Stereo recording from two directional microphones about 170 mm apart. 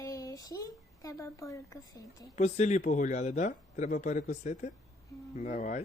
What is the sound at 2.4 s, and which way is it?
A man's voice, 45° left (ahead or behind).